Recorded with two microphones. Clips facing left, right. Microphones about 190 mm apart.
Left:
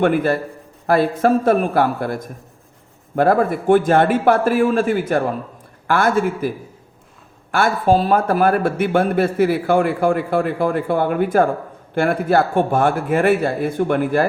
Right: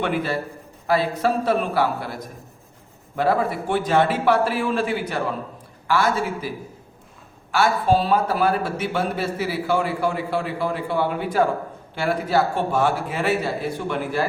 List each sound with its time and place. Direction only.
0.0 s a man's voice: 50° left (ahead or behind)
7.5 s a man's voice: 50° left (ahead or behind)